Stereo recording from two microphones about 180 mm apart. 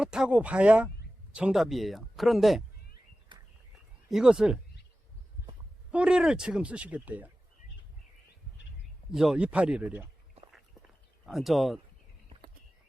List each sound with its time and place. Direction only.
0.0 s speech: 5° right (ahead or behind)
3.3 s a sound: 25° right (ahead or behind)
4.1 s speech: 5° right (ahead or behind)
5.9 s speech: 5° right (ahead or behind)
9.1 s speech: centre (ahead or behind)
11.3 s speech: centre (ahead or behind)